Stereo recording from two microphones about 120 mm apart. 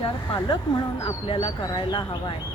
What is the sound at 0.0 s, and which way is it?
Speech, 40° left (ahead or behind).